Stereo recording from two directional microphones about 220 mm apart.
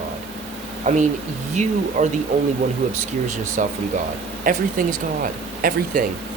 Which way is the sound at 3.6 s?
35° right (ahead or behind).